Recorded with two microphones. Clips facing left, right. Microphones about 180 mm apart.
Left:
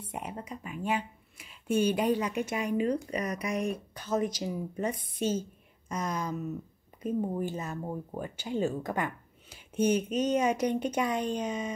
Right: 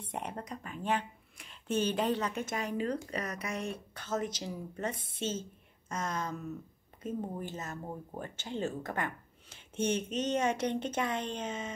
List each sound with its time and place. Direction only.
0.0 s speech: 5° left (ahead or behind)
5.1 s a woman's voice: 25° right (ahead or behind)
6.0 s speech: 10° left (ahead or behind)